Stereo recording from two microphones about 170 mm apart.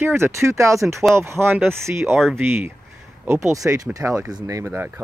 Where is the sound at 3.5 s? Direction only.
20° right (ahead or behind).